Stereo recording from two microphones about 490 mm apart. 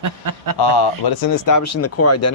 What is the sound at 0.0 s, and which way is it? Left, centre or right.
Speech, right.